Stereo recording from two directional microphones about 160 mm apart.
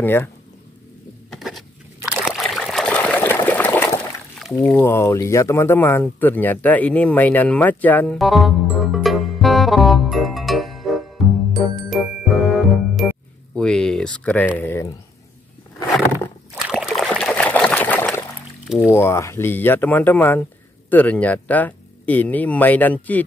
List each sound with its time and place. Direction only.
0.0 s speech: 10° left (ahead or behind)
1.3 s patter: centre (ahead or behind)
2.0 s trickle: centre (ahead or behind)
4.6 s speech: 10° left (ahead or behind)
8.2 s music: centre (ahead or behind)
13.6 s a sound: 5° left (ahead or behind)
14.6 s speech: 15° left (ahead or behind)
16.5 s trickle: 5° right (ahead or behind)
18.9 s speech: 15° left (ahead or behind)